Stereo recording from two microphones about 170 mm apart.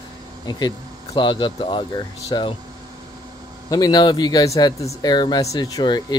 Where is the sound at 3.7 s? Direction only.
25° left (ahead or behind).